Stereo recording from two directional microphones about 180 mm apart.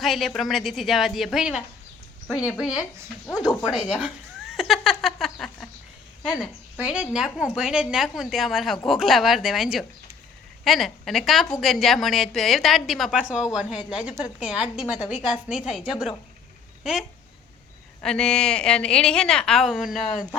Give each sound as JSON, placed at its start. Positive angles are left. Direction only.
{"t": 0.0, "sound": "a woman's voice", "side_deg": 0}
{"t": 3.2, "sound": "speech", "side_deg": 15}
{"t": 4.0, "sound": "a sound", "side_deg": 0}
{"t": 6.2, "sound": "a woman's voice", "side_deg": 5}
{"t": 6.7, "sound": "a woman's voice", "side_deg": -5}